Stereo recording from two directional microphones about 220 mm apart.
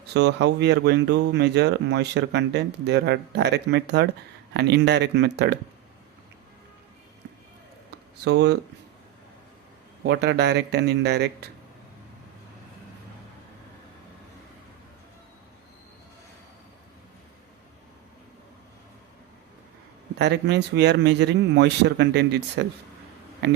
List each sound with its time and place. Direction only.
0.1 s speech: 50° right (ahead or behind)
8.2 s speech: 50° right (ahead or behind)
10.0 s speech: 50° right (ahead or behind)
20.1 s speech: 50° right (ahead or behind)